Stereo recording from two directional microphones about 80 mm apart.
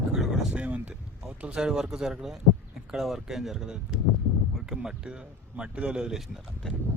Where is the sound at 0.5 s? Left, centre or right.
Centre.